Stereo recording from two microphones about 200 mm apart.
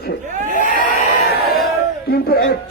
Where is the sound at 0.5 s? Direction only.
40° left (ahead or behind).